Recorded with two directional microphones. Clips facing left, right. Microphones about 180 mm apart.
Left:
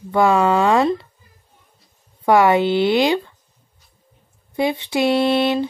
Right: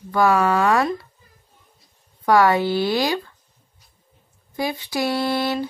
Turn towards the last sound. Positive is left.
turn(degrees=20)  # may be behind; listen again after turning